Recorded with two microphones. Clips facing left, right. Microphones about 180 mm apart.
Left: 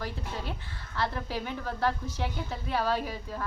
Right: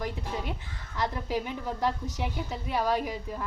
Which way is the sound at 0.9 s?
15° right (ahead or behind).